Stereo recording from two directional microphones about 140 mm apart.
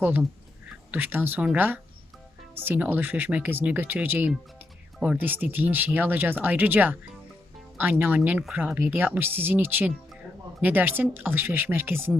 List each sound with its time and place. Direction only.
0.0 s speech: 15° right (ahead or behind)